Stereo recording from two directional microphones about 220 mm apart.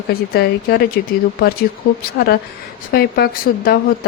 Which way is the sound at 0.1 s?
45° left (ahead or behind).